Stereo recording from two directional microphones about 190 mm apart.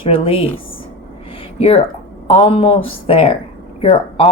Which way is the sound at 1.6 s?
35° left (ahead or behind).